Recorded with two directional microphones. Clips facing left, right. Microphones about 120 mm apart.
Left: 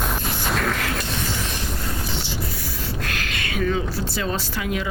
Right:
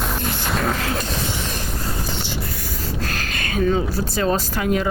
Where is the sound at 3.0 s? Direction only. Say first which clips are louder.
Right 2 dB; 35° right (ahead or behind).